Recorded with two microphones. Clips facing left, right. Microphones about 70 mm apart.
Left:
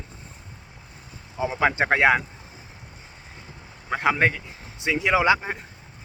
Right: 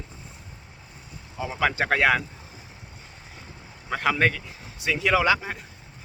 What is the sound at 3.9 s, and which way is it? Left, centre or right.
Speech, centre.